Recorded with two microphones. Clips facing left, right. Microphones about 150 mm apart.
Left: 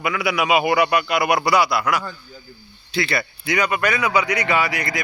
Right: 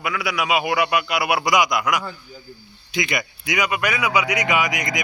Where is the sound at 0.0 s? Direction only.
Centre (ahead or behind).